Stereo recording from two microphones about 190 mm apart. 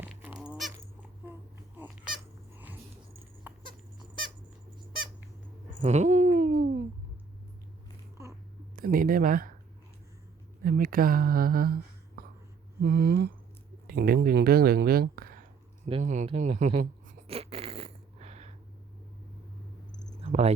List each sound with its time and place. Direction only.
0.0 s squeak: 5° right (ahead or behind)
2.1 s cat: 10° right (ahead or behind)
5.8 s babbling: 35° right (ahead or behind)
8.7 s speech: 50° right (ahead or behind)
10.6 s a sound: 50° right (ahead or behind)
13.8 s speech: 55° right (ahead or behind)
15.9 s speech: 35° right (ahead or behind)
17.2 s a sound: 30° right (ahead or behind)
20.2 s cricket: 35° right (ahead or behind)